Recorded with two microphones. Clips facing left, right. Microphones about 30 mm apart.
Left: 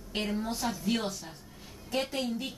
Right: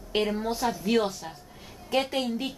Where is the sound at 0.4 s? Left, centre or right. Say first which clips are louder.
Right 5 dB; right.